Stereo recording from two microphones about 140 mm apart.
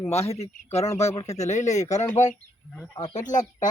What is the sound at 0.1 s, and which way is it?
Speech, 50° left (ahead or behind).